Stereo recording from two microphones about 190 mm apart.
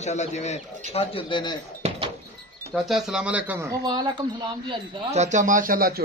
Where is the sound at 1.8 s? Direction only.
35° right (ahead or behind).